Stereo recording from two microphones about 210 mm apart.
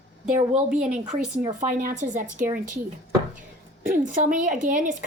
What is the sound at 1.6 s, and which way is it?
Speech, 40° right (ahead or behind).